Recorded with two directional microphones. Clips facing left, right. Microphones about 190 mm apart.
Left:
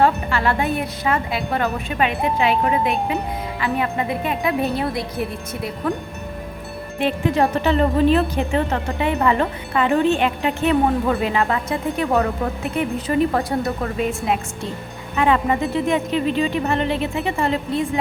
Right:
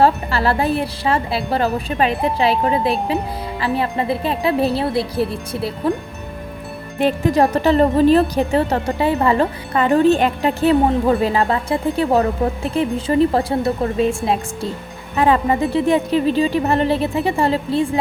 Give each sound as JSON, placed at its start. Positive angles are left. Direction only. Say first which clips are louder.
{"t": 0.0, "sound": "speech", "louder": "right 2 dB", "side_deg": -35}
{"t": 7.0, "sound": "speech", "louder": "right 3 dB", "side_deg": -40}